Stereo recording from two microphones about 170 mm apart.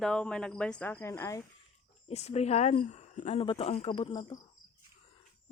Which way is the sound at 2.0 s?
40° left (ahead or behind).